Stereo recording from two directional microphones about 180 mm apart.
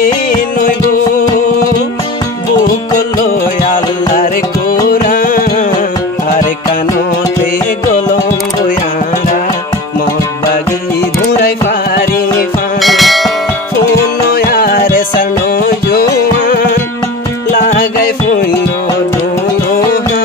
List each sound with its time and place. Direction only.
3.7 s music: 45° left (ahead or behind)
12.8 s church bell: centre (ahead or behind)
14.3 s music: 60° left (ahead or behind)